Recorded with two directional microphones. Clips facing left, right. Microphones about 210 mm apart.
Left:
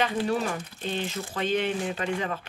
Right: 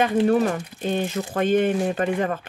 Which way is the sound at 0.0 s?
50° right (ahead or behind).